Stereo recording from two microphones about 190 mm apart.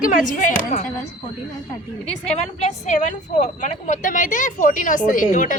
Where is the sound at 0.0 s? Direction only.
45° left (ahead or behind).